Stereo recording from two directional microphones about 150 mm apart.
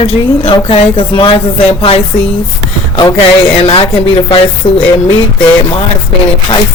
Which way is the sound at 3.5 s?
40° left (ahead or behind).